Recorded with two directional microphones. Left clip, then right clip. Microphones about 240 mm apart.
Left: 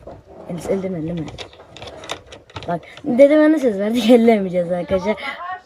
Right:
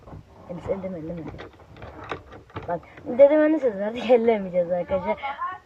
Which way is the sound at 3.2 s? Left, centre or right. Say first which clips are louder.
Left 4 dB; centre.